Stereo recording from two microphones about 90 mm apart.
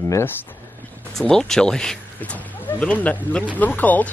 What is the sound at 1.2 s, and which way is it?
Speech, 5° left (ahead or behind).